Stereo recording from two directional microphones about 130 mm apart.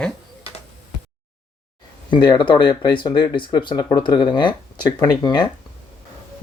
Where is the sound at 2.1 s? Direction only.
35° left (ahead or behind).